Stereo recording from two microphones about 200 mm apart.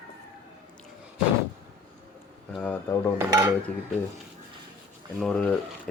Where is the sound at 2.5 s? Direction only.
10° left (ahead or behind).